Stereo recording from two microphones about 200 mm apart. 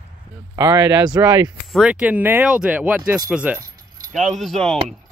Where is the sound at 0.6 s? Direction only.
20° right (ahead or behind).